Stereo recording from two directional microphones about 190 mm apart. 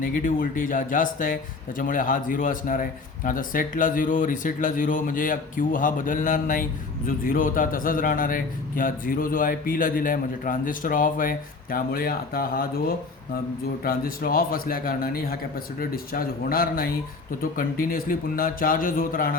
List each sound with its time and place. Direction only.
0.0 s a man's voice: 45° left (ahead or behind)
13.8 s a man's voice: 50° left (ahead or behind)